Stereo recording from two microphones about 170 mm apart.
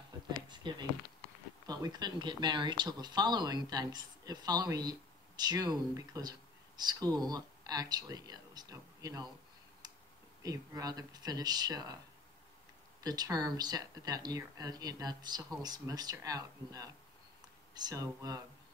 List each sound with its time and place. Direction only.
0.1 s a sound: 25° right (ahead or behind)
0.5 s speech: 25° right (ahead or behind)
10.4 s speech: 20° right (ahead or behind)
13.0 s speech: 25° right (ahead or behind)